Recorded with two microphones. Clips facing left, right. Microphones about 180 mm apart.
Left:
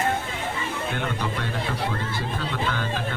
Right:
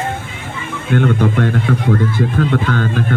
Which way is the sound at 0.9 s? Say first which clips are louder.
Right 19 dB; 55° right (ahead or behind).